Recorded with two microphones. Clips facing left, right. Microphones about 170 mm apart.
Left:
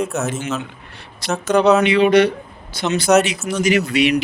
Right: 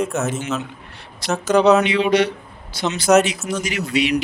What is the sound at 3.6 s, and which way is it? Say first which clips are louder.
Speech: left 6 dB; 65° left (ahead or behind).